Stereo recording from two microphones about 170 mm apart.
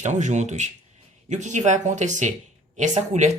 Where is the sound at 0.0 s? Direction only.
45° right (ahead or behind).